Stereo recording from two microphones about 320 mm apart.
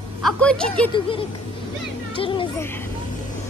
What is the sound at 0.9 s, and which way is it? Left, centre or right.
Speech, centre.